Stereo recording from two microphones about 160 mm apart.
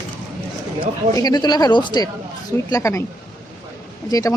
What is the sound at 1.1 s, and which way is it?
Speech, 25° left (ahead or behind).